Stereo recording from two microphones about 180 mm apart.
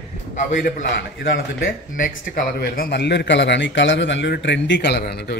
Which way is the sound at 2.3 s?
60° left (ahead or behind).